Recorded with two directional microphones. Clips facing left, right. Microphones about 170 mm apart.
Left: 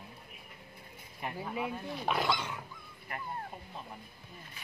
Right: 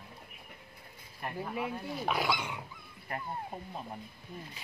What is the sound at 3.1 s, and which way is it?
Speech, 30° right (ahead or behind).